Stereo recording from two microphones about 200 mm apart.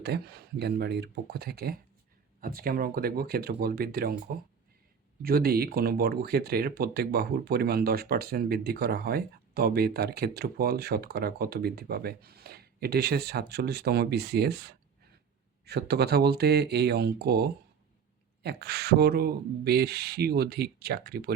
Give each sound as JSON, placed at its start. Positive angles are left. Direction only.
{"t": 0.1, "sound": "speech", "side_deg": -55}
{"t": 5.2, "sound": "speech", "side_deg": -50}